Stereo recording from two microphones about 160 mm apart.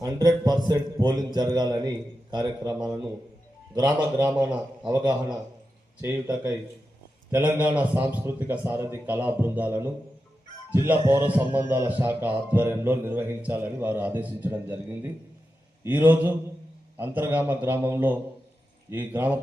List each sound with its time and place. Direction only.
0.0 s a man's voice: 20° right (ahead or behind)
3.8 s a man's voice: 25° right (ahead or behind)
4.4 s a man's voice: 5° right (ahead or behind)
6.0 s a man's voice: 15° right (ahead or behind)